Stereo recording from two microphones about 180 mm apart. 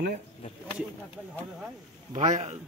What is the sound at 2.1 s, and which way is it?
Speech, 40° right (ahead or behind).